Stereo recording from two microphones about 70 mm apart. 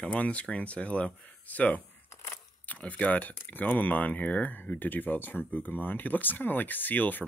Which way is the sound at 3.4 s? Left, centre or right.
Left.